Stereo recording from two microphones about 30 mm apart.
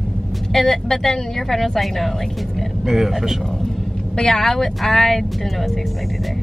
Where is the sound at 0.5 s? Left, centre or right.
Centre.